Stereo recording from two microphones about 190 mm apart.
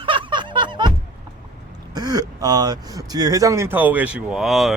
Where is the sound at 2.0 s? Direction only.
20° right (ahead or behind).